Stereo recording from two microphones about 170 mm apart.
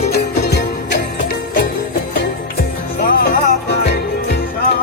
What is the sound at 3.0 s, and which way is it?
Music, 70° left (ahead or behind).